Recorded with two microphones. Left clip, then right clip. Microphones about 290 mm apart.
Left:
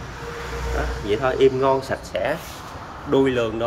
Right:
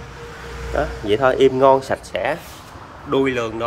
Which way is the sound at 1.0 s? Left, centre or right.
Centre.